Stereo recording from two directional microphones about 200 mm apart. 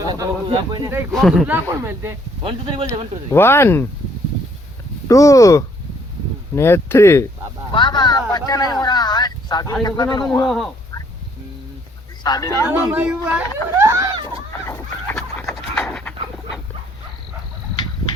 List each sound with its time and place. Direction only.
0.0 s speech: 20° right (ahead or behind)
1.1 s speech: centre (ahead or behind)
2.4 s speech: 30° right (ahead or behind)
3.3 s speech: 10° left (ahead or behind)
5.0 s speech: 15° left (ahead or behind)
12.2 s speech: 20° left (ahead or behind)
12.9 s speech: 5° right (ahead or behind)
13.7 s a sound: 15° right (ahead or behind)
14.7 s fowl: 15° left (ahead or behind)
15.7 s dog: 10° left (ahead or behind)